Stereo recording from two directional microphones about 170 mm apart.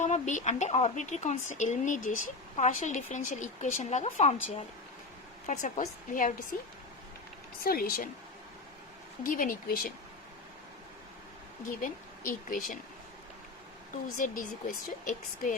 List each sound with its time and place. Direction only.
0.0 s speech: 45° left (ahead or behind)
5.5 s speech: 45° left (ahead or behind)
7.6 s speech: 60° left (ahead or behind)
9.2 s speech: 55° left (ahead or behind)
11.8 s speech: 55° left (ahead or behind)
14.2 s speech: 50° left (ahead or behind)